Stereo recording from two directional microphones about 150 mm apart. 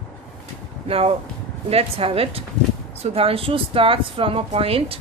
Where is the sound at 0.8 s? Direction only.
40° right (ahead or behind).